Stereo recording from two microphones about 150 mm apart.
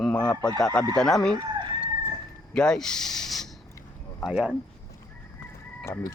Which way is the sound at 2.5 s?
5° left (ahead or behind).